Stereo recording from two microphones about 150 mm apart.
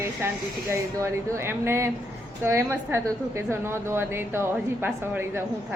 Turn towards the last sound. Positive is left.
turn(degrees=-15)  # may be behind; listen again after turning